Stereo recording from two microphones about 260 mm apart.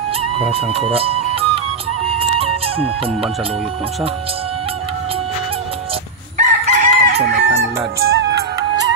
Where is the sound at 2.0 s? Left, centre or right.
Right.